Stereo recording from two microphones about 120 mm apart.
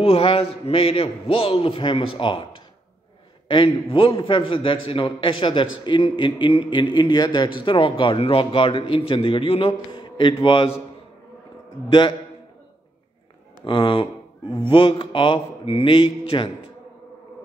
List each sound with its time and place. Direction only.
0.0 s a man's voice: 50° left (ahead or behind)
13.7 s a man's voice: 45° left (ahead or behind)